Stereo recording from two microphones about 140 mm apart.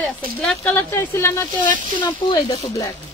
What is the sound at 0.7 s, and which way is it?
Speech, 15° left (ahead or behind).